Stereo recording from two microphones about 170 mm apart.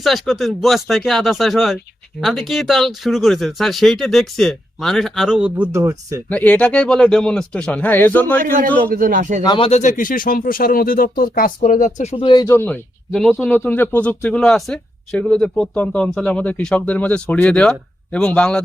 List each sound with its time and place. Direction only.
0.0 s speech: centre (ahead or behind); by 6.2 s 20° right (ahead or behind)
6.2 s speech: 10° left (ahead or behind)
8.4 s a man's voice: 55° right (ahead or behind)
9.4 s speech: 25° left (ahead or behind)
9.6 s speech: 45° left (ahead or behind)
12.1 s speech: 30° left (ahead or behind)
12.5 s speech: 10° left (ahead or behind)